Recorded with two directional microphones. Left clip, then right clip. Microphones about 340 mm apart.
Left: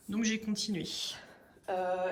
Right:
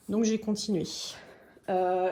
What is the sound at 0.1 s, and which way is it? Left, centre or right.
Speech, centre.